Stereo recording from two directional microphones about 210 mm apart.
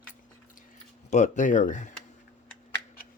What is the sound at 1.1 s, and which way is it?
Speech, 35° left (ahead or behind).